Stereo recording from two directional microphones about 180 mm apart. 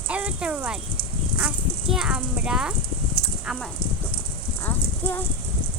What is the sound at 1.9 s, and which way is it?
A child's voice, 5° right (ahead or behind).